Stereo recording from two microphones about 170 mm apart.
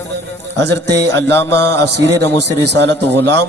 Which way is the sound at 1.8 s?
80° right.